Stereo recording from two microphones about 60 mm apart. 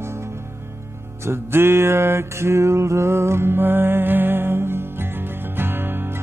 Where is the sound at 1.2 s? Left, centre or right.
Right.